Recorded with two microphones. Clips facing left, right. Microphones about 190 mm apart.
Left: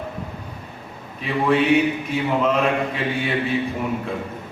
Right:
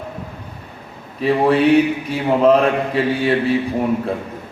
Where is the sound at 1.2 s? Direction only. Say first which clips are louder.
Right 5 dB; 35° right (ahead or behind).